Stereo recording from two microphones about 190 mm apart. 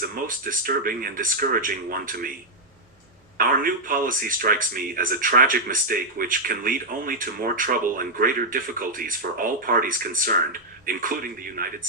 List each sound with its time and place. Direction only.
0.0 s a man's voice: 50° right (ahead or behind)
3.3 s a man's voice: 50° right (ahead or behind)